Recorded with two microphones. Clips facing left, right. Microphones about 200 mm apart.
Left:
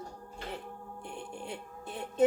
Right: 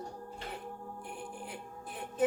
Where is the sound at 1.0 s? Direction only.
25° left (ahead or behind).